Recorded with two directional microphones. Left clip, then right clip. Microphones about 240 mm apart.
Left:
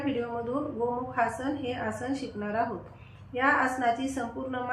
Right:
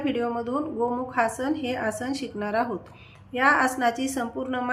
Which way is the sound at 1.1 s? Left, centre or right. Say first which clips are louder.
Right 4 dB; right.